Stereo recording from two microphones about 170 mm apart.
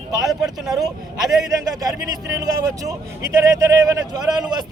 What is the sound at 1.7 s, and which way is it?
A man's voice, 20° right (ahead or behind).